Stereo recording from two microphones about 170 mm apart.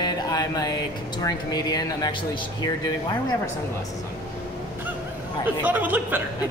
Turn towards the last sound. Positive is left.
turn(degrees=-10)  # may be behind; listen again after turning